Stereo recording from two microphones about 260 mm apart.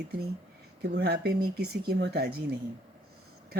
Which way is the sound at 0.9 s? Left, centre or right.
Right.